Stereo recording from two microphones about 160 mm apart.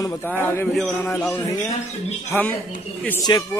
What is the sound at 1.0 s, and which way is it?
Speech, 10° left (ahead or behind).